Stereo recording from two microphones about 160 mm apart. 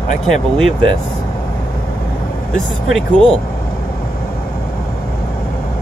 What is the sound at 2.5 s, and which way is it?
Speech, 5° left (ahead or behind).